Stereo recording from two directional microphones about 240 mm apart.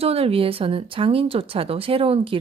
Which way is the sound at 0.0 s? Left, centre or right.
Right.